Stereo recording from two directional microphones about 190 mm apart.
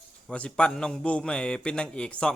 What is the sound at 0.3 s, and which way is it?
A man's voice, 5° left (ahead or behind).